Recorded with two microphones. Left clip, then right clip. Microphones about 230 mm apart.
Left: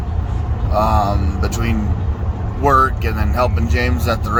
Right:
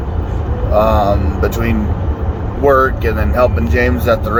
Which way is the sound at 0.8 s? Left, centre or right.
Left.